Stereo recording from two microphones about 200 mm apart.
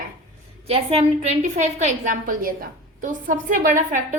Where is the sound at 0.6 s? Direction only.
30° right (ahead or behind).